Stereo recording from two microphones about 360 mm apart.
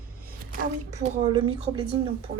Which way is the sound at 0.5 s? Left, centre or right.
Centre.